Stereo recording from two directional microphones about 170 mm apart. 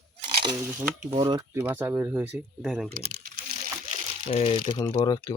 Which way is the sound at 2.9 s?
55° right (ahead or behind).